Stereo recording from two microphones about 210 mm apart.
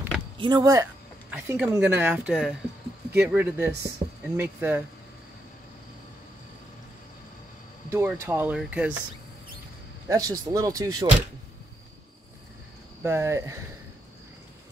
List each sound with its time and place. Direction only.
0.4 s speech: 20° right (ahead or behind)
4.0 s a sound: 25° right (ahead or behind)
4.4 s speech: 10° right (ahead or behind)
7.9 s speech: 10° right (ahead or behind)
10.0 s speech: 15° right (ahead or behind)
13.0 s speech: 15° right (ahead or behind)